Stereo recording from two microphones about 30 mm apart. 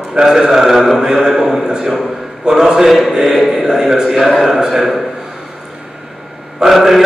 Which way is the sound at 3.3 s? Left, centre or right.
Centre.